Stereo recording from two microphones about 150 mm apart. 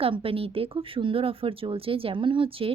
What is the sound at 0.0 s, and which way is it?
Speech, 40° right (ahead or behind).